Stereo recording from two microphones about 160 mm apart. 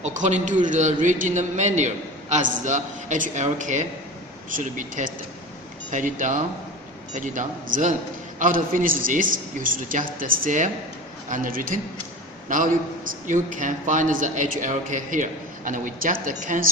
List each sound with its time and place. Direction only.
0.0 s a man's voice: 45° right (ahead or behind)